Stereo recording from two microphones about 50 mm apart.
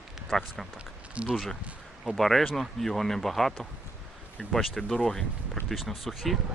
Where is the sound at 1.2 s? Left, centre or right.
Centre.